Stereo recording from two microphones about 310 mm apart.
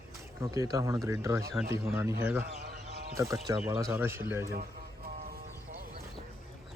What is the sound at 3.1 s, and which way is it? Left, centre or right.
Speech, centre.